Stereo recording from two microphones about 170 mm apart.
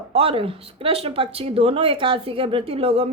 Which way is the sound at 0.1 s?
35° right (ahead or behind).